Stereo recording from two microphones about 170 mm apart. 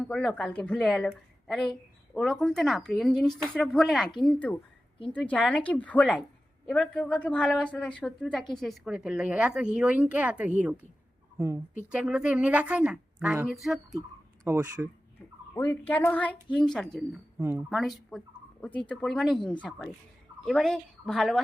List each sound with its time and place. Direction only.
0.0 s a woman's voice: 5° left (ahead or behind)
14.4 s speech: 10° right (ahead or behind)
15.5 s a woman's voice: 15° left (ahead or behind)
17.3 s speech: 10° right (ahead or behind)
17.7 s a woman's voice: centre (ahead or behind)